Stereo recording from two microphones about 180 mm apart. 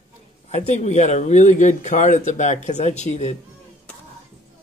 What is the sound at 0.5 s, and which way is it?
Speech, 40° left (ahead or behind).